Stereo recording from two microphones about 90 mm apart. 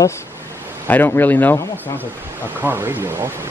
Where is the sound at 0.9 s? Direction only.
20° left (ahead or behind).